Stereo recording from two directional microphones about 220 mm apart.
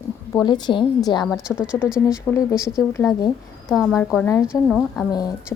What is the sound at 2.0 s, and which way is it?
Speech, 15° left (ahead or behind).